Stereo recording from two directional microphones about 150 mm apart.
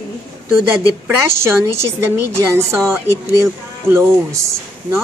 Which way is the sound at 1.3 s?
15° right (ahead or behind).